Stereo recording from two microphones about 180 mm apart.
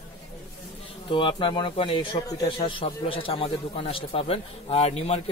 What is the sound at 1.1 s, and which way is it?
A man's voice, 25° left (ahead or behind).